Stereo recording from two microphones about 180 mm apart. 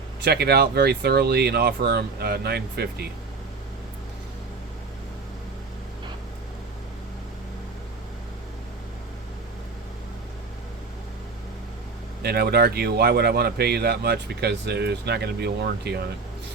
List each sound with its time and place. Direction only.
0.2 s speech: 60° right (ahead or behind)
12.2 s speech: 60° right (ahead or behind)